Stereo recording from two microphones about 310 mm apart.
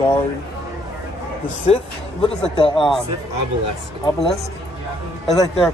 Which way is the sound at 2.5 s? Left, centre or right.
Centre.